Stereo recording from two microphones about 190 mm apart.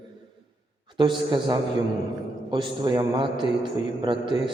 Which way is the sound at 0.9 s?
25° right (ahead or behind).